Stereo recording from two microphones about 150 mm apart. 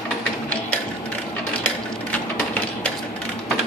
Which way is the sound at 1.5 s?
10° left (ahead or behind).